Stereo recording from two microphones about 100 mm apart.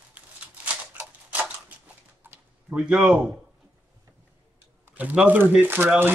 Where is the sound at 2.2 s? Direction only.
20° right (ahead or behind).